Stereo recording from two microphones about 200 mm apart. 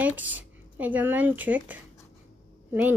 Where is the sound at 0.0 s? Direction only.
10° right (ahead or behind).